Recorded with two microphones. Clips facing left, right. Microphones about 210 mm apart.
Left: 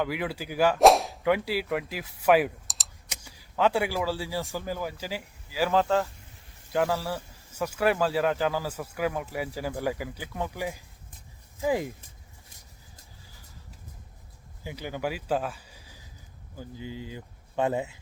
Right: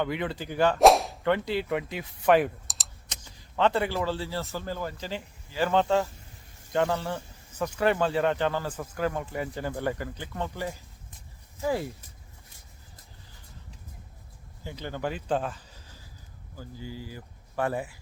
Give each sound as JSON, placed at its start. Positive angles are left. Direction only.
{"t": 0.0, "sound": "speech", "side_deg": 5}
{"t": 14.6, "sound": "speech", "side_deg": 10}